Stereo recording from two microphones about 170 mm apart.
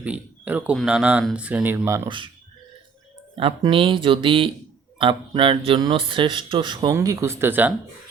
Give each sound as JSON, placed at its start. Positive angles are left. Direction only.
{"t": 0.0, "sound": "speech", "side_deg": -10}
{"t": 2.0, "sound": "speech", "side_deg": -30}
{"t": 3.3, "sound": "speech", "side_deg": -30}